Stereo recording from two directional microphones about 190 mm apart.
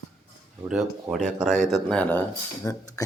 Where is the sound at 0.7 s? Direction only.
5° right (ahead or behind).